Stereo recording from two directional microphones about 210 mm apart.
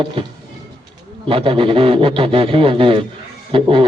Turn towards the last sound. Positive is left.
turn(degrees=-25)  # may be behind; listen again after turning